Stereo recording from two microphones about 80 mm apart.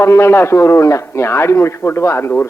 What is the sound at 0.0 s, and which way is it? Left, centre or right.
A man's voice, left.